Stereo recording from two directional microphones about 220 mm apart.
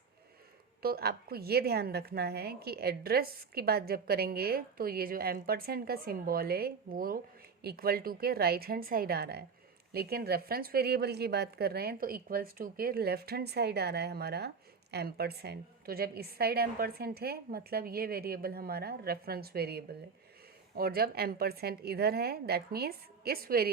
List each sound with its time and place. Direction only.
0.8 s speech: 45° right (ahead or behind)